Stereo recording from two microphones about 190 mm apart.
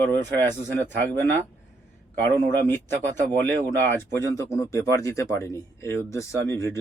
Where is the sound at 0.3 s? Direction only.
10° left (ahead or behind).